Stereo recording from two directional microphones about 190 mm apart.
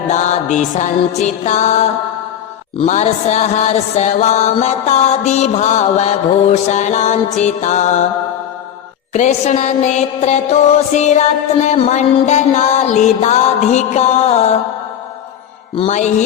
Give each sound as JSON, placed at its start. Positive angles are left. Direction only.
{"t": 0.1, "sound": "music", "side_deg": 40}
{"t": 9.1, "sound": "music", "side_deg": 40}
{"t": 15.7, "sound": "music", "side_deg": 35}